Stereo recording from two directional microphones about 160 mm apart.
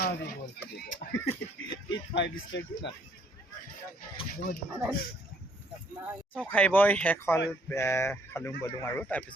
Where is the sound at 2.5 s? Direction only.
90° left.